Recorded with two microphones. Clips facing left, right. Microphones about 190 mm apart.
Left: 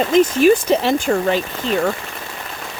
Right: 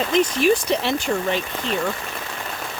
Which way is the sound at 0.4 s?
40° left (ahead or behind).